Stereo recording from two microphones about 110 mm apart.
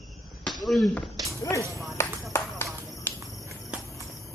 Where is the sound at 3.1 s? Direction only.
20° left (ahead or behind).